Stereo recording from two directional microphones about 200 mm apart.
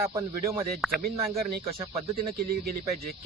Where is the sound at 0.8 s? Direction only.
Centre (ahead or behind).